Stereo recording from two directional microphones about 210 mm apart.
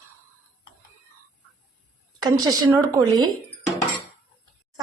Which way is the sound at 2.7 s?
15° right (ahead or behind).